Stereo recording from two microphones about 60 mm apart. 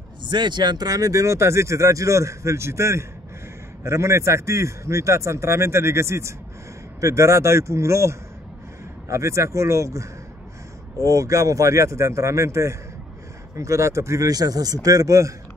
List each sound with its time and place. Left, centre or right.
0.8 s speech: right
1.2 s a man's voice: right